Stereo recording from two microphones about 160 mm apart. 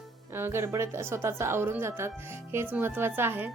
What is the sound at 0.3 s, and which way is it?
A woman's voice, 15° right (ahead or behind).